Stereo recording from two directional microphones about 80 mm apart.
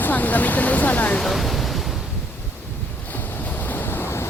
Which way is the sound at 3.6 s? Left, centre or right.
Left.